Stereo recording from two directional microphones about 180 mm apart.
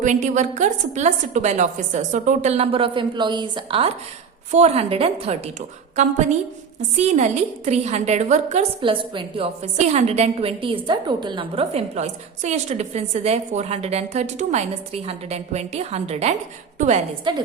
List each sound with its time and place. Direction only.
0.0 s a woman's voice: 40° right (ahead or behind)
7.0 s a woman's voice: 40° right (ahead or behind)
17.3 s a woman's voice: 25° right (ahead or behind)